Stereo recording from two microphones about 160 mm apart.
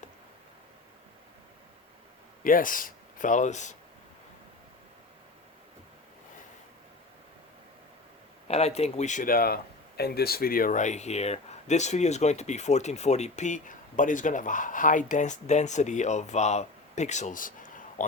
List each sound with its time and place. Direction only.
2.4 s speech: 60° left (ahead or behind)
8.4 s speech: 40° left (ahead or behind)